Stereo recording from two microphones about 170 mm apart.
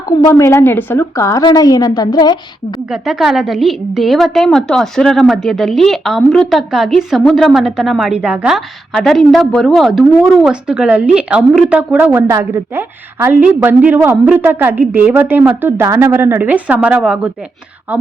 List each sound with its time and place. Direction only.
0.3 s a woman's voice: 15° left (ahead or behind)
2.9 s a woman's voice: centre (ahead or behind)